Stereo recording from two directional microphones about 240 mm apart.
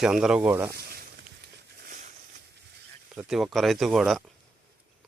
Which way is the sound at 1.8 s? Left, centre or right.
Right.